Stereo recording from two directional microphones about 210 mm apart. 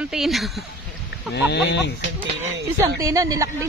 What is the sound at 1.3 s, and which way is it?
Speech, 55° left (ahead or behind).